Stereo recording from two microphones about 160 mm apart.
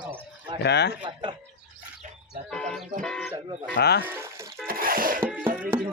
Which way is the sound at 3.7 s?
90° left.